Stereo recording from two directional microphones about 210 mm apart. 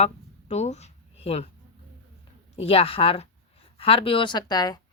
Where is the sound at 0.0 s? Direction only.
30° left (ahead or behind).